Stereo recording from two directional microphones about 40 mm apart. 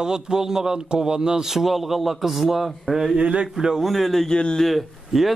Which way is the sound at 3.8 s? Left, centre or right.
Centre.